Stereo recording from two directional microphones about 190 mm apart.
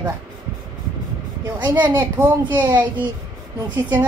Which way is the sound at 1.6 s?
25° right (ahead or behind).